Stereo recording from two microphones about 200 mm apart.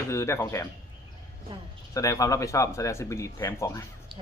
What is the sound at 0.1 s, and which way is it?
Speech, 15° left (ahead or behind).